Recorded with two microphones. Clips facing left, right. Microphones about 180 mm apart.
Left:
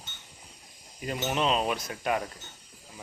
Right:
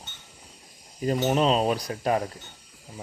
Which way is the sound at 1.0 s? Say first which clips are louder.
Right 7 dB; 35° right (ahead or behind).